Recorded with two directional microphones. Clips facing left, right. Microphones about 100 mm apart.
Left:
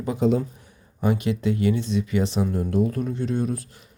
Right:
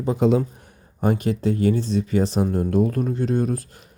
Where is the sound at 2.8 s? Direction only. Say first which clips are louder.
Right 3 dB; 50° right (ahead or behind).